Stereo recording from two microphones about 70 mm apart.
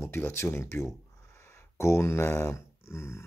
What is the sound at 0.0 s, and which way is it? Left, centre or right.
Speech, left.